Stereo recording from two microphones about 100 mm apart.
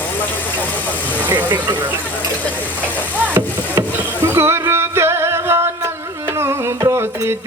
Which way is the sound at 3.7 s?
20° right (ahead or behind).